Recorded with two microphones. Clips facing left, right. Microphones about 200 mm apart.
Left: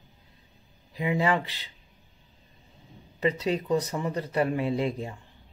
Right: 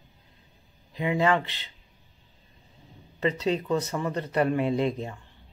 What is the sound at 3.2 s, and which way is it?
Speech, 10° left (ahead or behind).